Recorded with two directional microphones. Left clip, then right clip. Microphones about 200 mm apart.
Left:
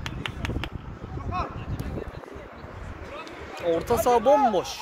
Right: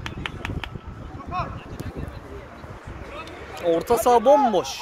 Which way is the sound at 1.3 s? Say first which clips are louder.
Right 2 dB; 20° left (ahead or behind).